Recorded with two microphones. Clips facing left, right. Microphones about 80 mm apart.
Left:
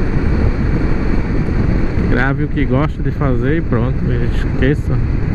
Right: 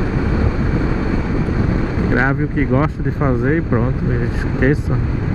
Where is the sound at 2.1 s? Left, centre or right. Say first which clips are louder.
Even; centre.